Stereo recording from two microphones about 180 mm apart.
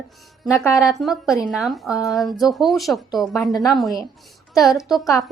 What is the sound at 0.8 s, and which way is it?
A woman's voice, centre (ahead or behind).